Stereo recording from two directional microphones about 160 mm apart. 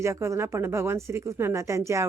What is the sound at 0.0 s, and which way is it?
A woman's voice, 15° right (ahead or behind).